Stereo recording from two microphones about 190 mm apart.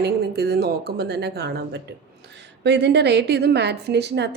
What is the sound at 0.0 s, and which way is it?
A woman's voice, 55° right (ahead or behind).